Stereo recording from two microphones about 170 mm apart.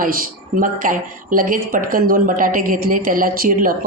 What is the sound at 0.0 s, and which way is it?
A woman's voice, 55° right (ahead or behind).